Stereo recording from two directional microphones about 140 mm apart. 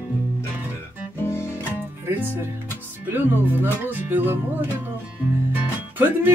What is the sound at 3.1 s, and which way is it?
Music, 15° right (ahead or behind).